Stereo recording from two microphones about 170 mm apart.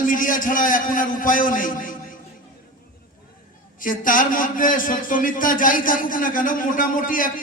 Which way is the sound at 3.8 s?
55° left (ahead or behind).